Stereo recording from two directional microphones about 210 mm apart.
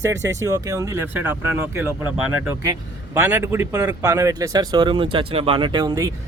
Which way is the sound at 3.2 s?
10° right (ahead or behind).